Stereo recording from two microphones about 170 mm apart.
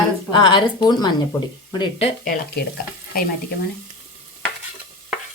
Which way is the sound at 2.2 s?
60° left (ahead or behind).